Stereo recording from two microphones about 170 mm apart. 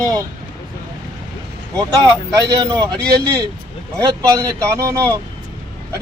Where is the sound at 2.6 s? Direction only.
20° right (ahead or behind).